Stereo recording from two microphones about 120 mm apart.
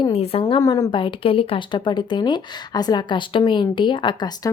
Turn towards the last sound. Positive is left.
turn(degrees=35)  # may be behind; listen again after turning